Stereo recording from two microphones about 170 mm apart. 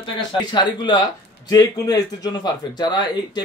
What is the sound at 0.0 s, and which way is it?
Speech, 25° left (ahead or behind).